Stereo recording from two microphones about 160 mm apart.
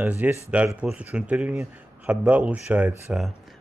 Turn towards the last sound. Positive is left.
turn(degrees=-5)  # may be behind; listen again after turning